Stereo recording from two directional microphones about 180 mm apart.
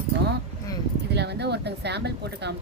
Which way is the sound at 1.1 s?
70° right (ahead or behind).